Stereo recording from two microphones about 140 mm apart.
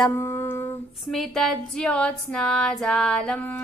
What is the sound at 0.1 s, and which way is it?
Humming, 20° left (ahead or behind).